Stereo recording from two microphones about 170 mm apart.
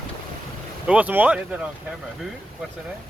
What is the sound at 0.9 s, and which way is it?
Speech, 10° right (ahead or behind).